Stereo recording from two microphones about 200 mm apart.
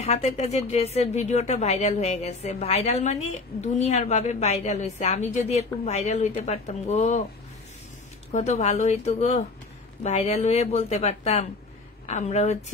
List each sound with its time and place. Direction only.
0.0 s a woman's voice: 35° left (ahead or behind)
8.3 s a woman's voice: 35° left (ahead or behind)